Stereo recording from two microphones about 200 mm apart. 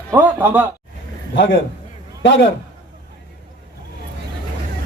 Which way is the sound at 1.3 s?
60° left (ahead or behind).